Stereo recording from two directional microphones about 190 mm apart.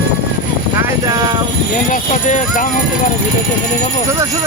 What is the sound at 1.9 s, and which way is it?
Speech, 45° left (ahead or behind).